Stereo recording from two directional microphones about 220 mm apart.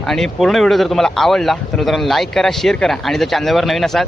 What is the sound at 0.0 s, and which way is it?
Speech, centre (ahead or behind).